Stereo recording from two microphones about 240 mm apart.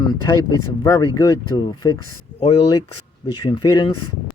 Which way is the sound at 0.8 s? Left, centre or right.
Centre.